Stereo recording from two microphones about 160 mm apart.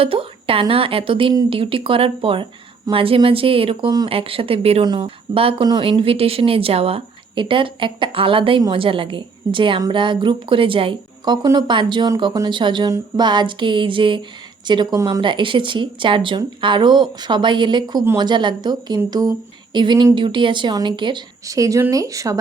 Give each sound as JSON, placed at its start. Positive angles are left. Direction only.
{"t": 0.0, "sound": "speech", "side_deg": -35}